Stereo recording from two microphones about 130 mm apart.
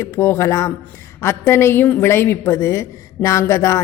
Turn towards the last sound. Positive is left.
turn(degrees=25)  # may be behind; listen again after turning